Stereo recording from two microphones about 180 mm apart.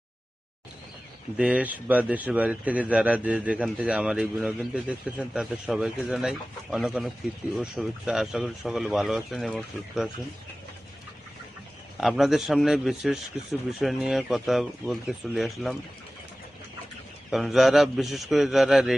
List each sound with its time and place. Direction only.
1.4 s a man's voice: 5° right (ahead or behind)
11.9 s a man's voice: centre (ahead or behind)
17.3 s a man's voice: centre (ahead or behind)